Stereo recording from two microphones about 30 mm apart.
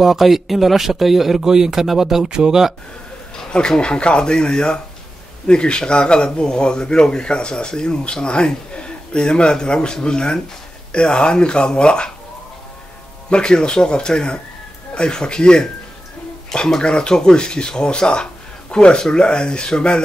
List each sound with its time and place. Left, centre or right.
0.0 s speech: centre
2.2 s speech: right
3.5 s speech: left
13.3 s a man's voice: left
18.9 s speech: left